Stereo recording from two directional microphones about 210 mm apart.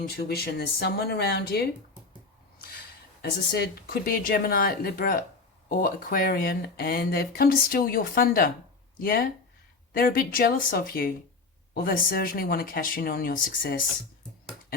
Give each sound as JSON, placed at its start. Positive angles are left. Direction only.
{"t": 0.3, "sound": "speech", "side_deg": 50}
{"t": 3.2, "sound": "speech", "side_deg": 45}